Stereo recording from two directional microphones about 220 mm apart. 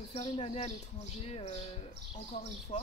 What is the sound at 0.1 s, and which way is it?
Speech, 30° left (ahead or behind).